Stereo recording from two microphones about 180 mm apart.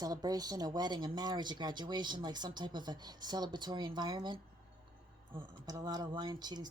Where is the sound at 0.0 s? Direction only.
20° right (ahead or behind).